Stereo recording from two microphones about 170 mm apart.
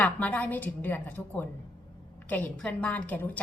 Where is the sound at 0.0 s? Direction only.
10° left (ahead or behind).